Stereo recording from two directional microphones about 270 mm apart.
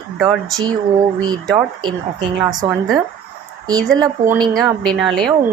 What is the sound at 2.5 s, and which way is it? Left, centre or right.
Speech, centre.